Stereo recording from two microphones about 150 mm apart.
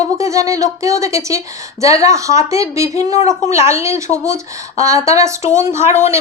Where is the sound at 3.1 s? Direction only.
55° left (ahead or behind).